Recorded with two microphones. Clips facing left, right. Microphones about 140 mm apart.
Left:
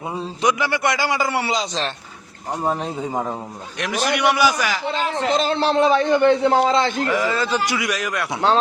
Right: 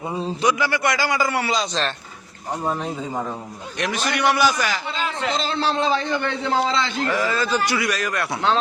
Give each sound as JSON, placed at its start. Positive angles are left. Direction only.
{"t": 0.4, "sound": "a man's voice", "side_deg": 20}
{"t": 3.8, "sound": "a man's voice", "side_deg": 10}
{"t": 4.9, "sound": "a man's voice", "side_deg": 50}
{"t": 7.1, "sound": "a man's voice", "side_deg": 20}